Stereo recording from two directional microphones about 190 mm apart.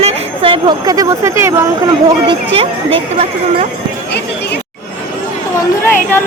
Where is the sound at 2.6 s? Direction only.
30° right (ahead or behind).